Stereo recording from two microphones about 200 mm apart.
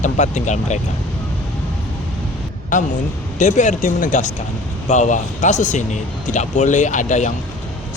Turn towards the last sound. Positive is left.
turn(degrees=35)  # may be behind; listen again after turning